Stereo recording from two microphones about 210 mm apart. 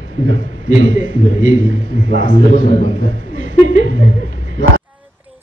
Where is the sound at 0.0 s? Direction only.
65° right (ahead or behind).